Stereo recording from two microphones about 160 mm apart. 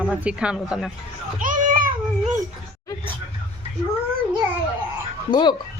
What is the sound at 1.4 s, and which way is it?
Children playing, 55° right (ahead or behind).